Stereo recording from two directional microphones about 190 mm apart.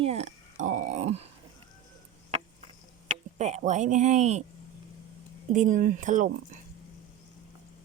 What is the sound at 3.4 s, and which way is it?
Speech, 35° right (ahead or behind).